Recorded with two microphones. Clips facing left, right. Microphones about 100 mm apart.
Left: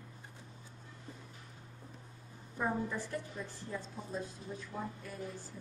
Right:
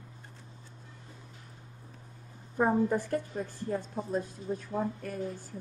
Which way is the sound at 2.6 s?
55° right (ahead or behind).